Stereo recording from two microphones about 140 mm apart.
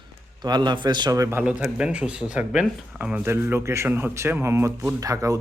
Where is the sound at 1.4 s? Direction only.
10° right (ahead or behind).